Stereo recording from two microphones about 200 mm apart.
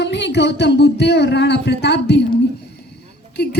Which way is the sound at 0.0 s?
60° left (ahead or behind).